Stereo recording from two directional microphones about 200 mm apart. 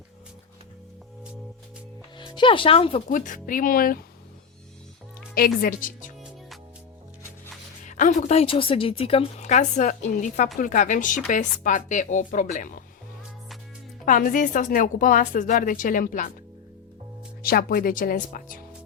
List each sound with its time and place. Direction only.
2.1 s speech: 25° left (ahead or behind)
3.1 s speech: 40° left (ahead or behind)
5.3 s speech: 45° left (ahead or behind)
7.9 s a woman's voice: 40° left (ahead or behind)
14.0 s a woman's voice: 40° left (ahead or behind)
17.4 s speech: 45° left (ahead or behind)